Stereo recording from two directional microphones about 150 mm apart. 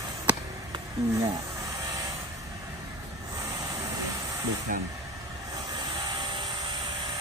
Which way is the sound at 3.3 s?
20° right (ahead or behind).